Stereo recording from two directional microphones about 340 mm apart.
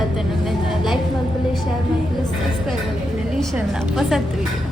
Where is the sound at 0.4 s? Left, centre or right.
Centre.